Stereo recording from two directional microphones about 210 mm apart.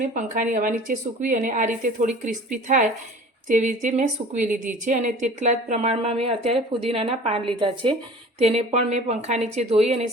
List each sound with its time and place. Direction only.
0.0 s speech: 40° right (ahead or behind)